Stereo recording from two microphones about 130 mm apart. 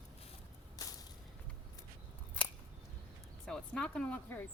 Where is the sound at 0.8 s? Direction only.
30° left (ahead or behind).